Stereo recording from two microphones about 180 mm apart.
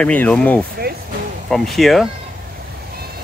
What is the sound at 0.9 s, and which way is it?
Speech, 55° right (ahead or behind).